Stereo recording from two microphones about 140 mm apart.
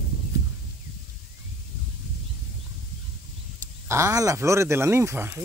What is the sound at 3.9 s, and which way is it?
Speech, 20° right (ahead or behind).